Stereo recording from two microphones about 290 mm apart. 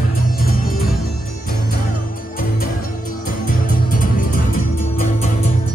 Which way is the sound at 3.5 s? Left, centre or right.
Left.